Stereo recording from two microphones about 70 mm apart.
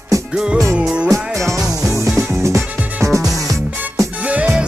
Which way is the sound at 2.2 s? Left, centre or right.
Right.